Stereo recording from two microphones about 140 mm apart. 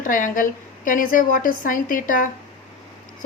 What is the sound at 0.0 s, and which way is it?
A woman's voice, 70° left (ahead or behind).